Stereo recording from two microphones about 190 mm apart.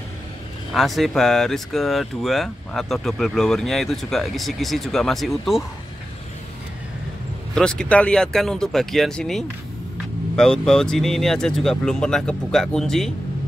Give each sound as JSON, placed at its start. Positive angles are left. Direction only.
{"t": 0.7, "sound": "speech", "side_deg": 0}
{"t": 7.5, "sound": "speech", "side_deg": 5}